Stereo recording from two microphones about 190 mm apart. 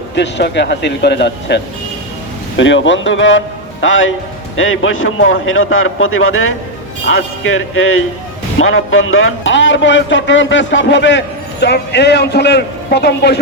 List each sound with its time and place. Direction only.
0.2 s a man's voice: 65° left (ahead or behind)